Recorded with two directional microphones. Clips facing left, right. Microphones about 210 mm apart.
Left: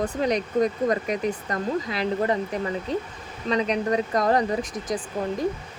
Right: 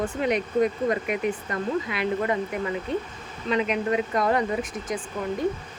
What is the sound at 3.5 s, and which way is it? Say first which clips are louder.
Speech: left 1 dB; 35° left (ahead or behind).